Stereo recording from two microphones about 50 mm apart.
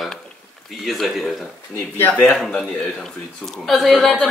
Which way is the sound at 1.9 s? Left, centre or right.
Left.